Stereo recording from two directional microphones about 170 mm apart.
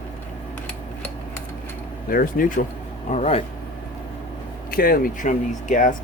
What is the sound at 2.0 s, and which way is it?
Speech, 55° left (ahead or behind).